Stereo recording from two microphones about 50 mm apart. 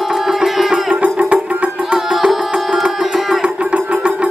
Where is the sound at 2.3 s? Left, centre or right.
Centre.